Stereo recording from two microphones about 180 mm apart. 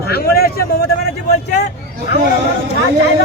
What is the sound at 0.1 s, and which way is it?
Speech, 60° left (ahead or behind).